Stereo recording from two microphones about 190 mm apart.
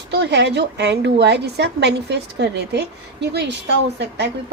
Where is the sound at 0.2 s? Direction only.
65° right (ahead or behind).